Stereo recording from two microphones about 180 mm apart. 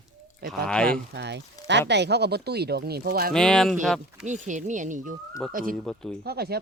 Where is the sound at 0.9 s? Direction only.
70° right (ahead or behind).